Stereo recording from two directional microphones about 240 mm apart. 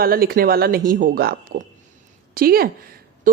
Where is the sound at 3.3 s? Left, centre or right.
Right.